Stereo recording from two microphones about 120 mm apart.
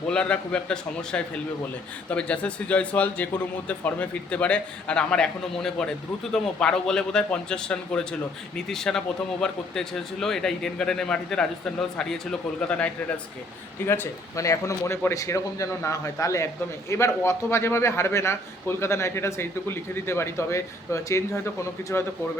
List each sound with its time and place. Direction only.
0.1 s a man's voice: 10° left (ahead or behind)